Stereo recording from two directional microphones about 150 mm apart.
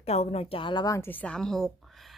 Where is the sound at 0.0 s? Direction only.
45° left (ahead or behind).